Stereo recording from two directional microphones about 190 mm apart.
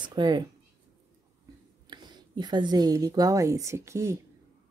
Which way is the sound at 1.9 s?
25° right (ahead or behind).